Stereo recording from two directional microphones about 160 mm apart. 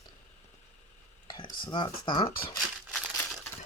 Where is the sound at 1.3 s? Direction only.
30° left (ahead or behind).